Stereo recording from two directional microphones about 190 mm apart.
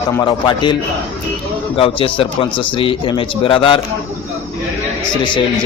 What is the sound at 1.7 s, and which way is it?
Speech, 30° left (ahead or behind).